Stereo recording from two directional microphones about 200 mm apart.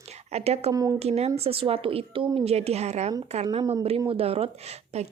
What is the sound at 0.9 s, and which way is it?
A woman's voice, 30° right (ahead or behind).